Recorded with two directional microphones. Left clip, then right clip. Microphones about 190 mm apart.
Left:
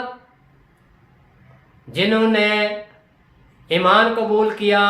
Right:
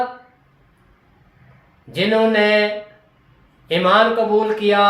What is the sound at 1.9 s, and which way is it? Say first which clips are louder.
Speech: right 1 dB; 25° left (ahead or behind).